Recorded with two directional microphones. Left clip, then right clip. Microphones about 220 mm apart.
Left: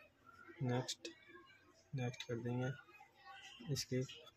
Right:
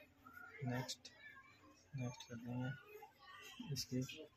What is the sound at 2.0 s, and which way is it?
Speech, 45° left (ahead or behind).